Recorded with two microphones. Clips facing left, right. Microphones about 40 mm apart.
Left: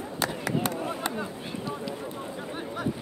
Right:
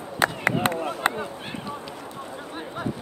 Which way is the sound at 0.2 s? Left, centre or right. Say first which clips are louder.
Right 6 dB; right.